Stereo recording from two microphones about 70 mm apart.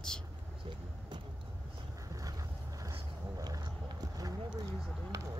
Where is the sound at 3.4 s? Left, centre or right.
Right.